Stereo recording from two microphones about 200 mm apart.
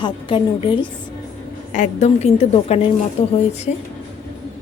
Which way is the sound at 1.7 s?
35° left (ahead or behind).